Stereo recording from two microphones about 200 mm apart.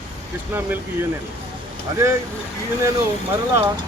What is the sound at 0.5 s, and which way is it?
Speech, 10° right (ahead or behind).